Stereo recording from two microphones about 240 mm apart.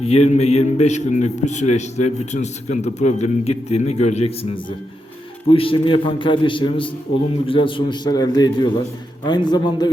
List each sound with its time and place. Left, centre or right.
0.0 s a man's voice: left